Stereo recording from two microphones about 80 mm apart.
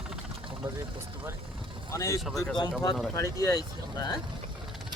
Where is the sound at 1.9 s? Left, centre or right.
Left.